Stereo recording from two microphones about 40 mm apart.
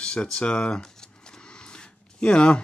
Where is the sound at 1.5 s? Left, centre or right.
Left.